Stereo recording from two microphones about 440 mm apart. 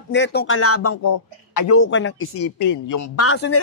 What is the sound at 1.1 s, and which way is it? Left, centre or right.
Speech, left.